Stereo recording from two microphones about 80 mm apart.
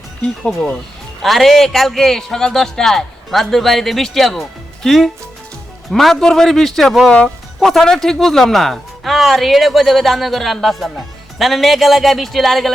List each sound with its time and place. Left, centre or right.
0.2 s speech: centre